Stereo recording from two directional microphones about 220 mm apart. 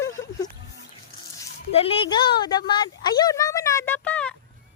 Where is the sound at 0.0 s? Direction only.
15° left (ahead or behind).